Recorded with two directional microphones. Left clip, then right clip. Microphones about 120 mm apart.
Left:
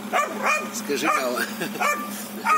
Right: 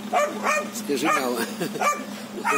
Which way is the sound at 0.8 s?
40° right (ahead or behind).